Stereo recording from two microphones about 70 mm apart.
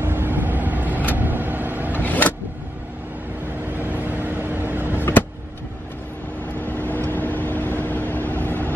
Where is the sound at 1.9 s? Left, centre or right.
Left.